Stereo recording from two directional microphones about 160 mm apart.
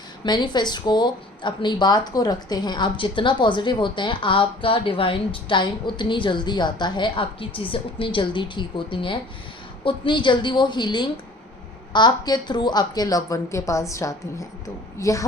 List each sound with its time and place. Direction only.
0.3 s speech: 25° left (ahead or behind)